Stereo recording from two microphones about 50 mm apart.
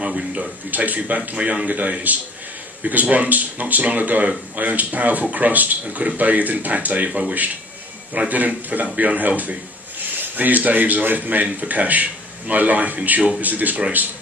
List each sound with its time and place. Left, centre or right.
0.0 s speech: centre
0.7 s speech: right